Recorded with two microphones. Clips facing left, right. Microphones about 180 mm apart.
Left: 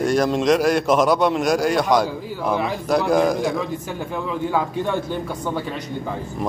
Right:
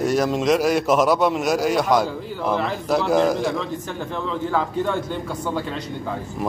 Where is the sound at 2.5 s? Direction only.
10° left (ahead or behind).